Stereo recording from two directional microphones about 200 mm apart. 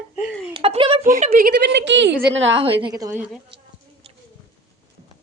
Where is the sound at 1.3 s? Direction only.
50° right (ahead or behind).